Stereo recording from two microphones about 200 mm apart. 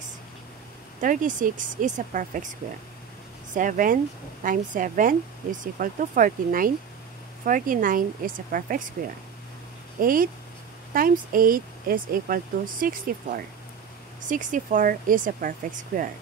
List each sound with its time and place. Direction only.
1.0 s speech: 40° right (ahead or behind)
3.5 s speech: 40° right (ahead or behind)
9.9 s speech: 45° right (ahead or behind)